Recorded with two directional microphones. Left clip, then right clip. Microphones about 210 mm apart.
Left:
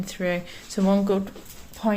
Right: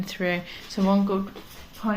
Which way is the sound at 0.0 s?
35° left (ahead or behind).